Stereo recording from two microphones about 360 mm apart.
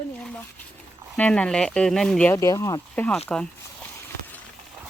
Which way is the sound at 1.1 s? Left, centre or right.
Centre.